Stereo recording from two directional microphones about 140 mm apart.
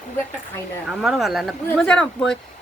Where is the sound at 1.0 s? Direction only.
Centre (ahead or behind).